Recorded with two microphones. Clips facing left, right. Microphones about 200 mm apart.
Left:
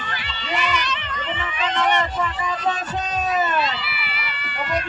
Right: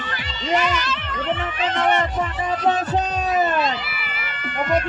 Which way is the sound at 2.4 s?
60° right (ahead or behind).